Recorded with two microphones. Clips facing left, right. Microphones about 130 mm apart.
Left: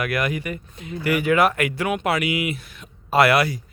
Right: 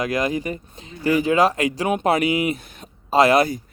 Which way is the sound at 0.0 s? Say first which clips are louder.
Right 2 dB; 20° right (ahead or behind).